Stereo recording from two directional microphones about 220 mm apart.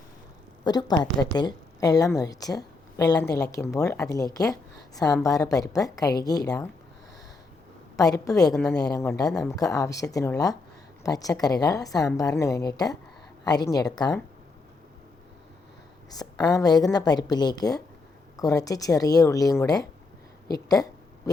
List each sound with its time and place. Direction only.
0.6 s a woman's voice: 20° left (ahead or behind)
7.9 s a woman's voice: 15° left (ahead or behind)
8.5 s speech: 5° left (ahead or behind)
9.5 s a woman's voice: 15° left (ahead or behind)
16.0 s a woman's voice: 15° left (ahead or behind)